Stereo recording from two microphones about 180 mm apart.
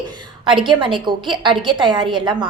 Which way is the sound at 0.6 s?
25° right (ahead or behind).